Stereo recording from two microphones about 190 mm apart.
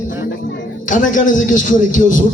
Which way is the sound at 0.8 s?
45° left (ahead or behind).